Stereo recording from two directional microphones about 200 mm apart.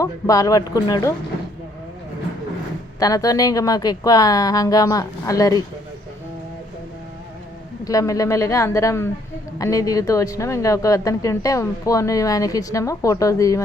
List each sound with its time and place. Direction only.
0.0 s speech: 15° left (ahead or behind)
3.0 s speech: 15° left (ahead or behind)
7.9 s speech: 15° left (ahead or behind)